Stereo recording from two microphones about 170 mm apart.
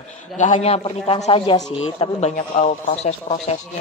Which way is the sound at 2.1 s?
40° left (ahead or behind).